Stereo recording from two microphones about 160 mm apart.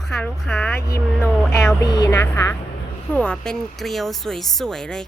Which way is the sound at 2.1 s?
10° left (ahead or behind).